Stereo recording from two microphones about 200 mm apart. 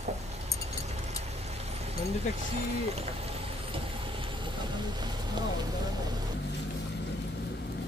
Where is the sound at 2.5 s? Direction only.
30° right (ahead or behind).